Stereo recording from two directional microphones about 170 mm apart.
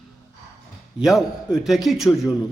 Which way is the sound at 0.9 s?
5° right (ahead or behind).